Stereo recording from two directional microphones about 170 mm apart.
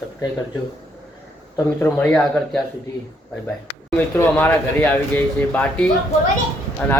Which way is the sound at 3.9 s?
10° left (ahead or behind).